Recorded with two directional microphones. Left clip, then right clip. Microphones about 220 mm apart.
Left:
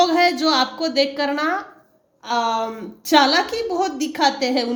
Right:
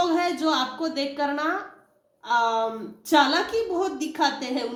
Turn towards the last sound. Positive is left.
turn(degrees=45)  # may be behind; listen again after turning